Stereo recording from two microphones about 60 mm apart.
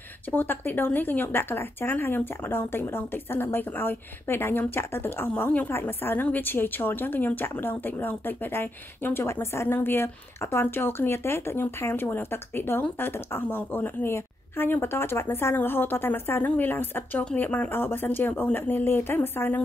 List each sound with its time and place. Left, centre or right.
0.3 s speech: left
9.7 s speech: left